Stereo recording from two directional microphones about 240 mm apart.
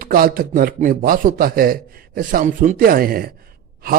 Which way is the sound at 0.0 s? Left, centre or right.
Right.